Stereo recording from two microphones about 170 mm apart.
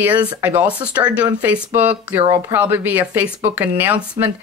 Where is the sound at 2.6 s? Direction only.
10° right (ahead or behind).